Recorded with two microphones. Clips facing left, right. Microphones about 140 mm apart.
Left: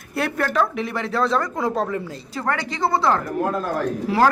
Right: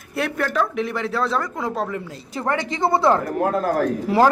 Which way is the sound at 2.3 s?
20° right (ahead or behind).